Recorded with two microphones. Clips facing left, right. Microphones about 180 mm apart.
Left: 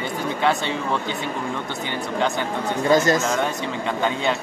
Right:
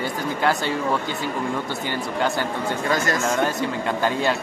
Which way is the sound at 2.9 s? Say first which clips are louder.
Left 7 dB; 20° left (ahead or behind).